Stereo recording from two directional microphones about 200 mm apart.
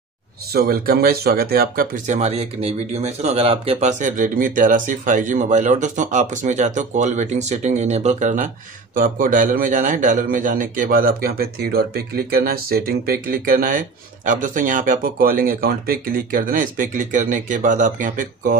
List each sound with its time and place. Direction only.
0.5 s a man's voice: 50° right (ahead or behind)